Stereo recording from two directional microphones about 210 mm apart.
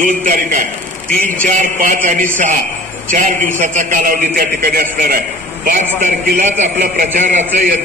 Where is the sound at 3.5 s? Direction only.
35° right (ahead or behind).